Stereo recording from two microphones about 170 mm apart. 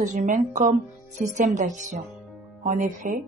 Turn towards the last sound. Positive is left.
turn(degrees=-50)  # may be behind; listen again after turning